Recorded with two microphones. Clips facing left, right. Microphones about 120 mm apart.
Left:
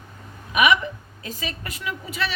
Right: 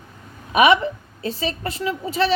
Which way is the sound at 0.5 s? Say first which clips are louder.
Right 5 dB; 30° right (ahead or behind).